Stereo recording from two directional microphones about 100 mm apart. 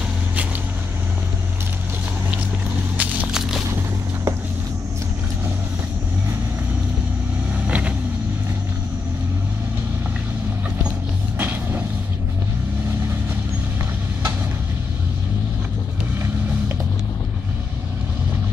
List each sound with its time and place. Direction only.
3.0 s walk: 10° right (ahead or behind)
7.6 s vehicle: 15° right (ahead or behind)
11.3 s vehicle: 20° right (ahead or behind)